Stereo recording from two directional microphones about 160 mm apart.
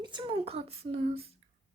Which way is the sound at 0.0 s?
30° right (ahead or behind).